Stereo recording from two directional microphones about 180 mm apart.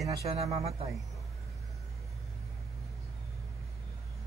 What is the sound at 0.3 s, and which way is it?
Speech, 35° right (ahead or behind).